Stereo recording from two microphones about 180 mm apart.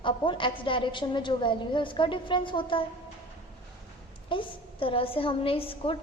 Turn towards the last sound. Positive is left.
turn(degrees=30)  # may be behind; listen again after turning